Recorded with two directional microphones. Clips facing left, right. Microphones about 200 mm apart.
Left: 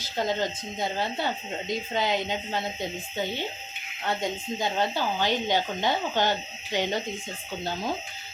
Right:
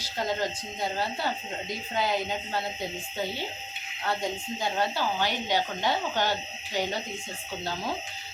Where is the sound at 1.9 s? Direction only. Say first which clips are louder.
Even; 20° left (ahead or behind).